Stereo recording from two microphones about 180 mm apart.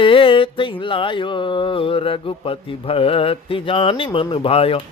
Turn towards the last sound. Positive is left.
turn(degrees=30)  # may be behind; listen again after turning